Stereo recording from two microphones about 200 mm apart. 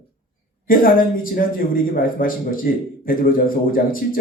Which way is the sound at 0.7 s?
45° left (ahead or behind).